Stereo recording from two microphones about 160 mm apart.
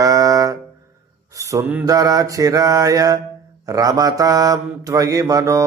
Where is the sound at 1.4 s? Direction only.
20° right (ahead or behind).